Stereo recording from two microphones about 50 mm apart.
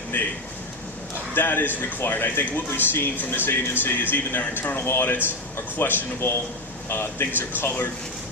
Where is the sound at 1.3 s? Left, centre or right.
Left.